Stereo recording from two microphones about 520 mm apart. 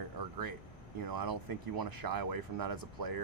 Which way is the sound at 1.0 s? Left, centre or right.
Right.